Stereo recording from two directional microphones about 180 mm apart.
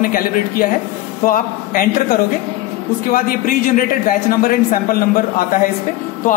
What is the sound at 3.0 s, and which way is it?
Speech, 50° left (ahead or behind).